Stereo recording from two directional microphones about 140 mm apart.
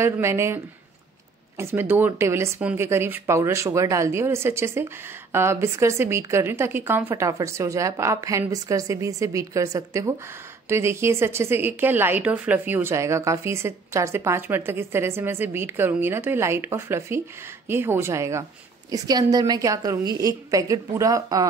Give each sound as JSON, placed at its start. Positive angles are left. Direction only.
{"t": 0.0, "sound": "speech", "side_deg": -20}
{"t": 1.6, "sound": "speech", "side_deg": -15}